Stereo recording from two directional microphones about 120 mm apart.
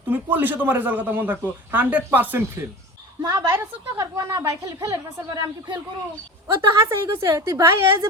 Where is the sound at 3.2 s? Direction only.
30° right (ahead or behind).